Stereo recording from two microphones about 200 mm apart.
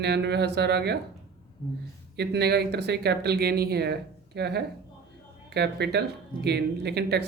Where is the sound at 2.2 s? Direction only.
55° right (ahead or behind).